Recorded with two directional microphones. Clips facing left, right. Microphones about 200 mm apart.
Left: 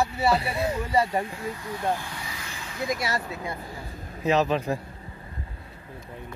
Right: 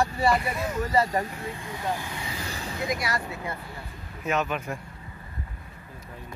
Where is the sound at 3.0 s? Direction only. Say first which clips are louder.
Left 1 dB; 25° left (ahead or behind).